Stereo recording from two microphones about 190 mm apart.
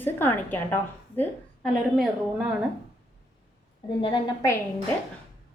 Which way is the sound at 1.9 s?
Centre (ahead or behind).